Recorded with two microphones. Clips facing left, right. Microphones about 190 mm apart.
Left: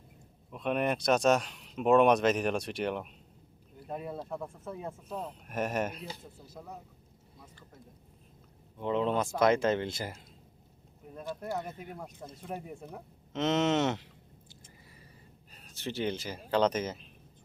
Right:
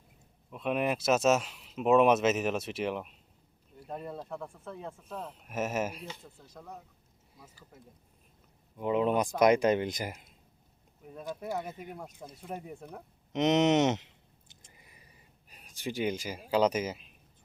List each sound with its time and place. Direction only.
0.5 s speech: centre (ahead or behind)
6.4 s speech: 5° left (ahead or behind)
7.3 s speech: 5° right (ahead or behind)
8.8 s speech: 10° right (ahead or behind)
11.3 s speech: 10° right (ahead or behind)
13.3 s speech: 20° right (ahead or behind)
14.5 s a sound: 15° right (ahead or behind)
15.4 s speech: 10° right (ahead or behind)